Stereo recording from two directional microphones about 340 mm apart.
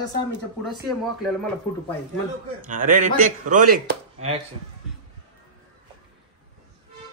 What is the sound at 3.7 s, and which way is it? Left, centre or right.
Chopping, right.